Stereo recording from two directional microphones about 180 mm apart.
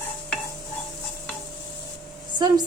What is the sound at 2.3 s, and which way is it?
Speech, 25° right (ahead or behind).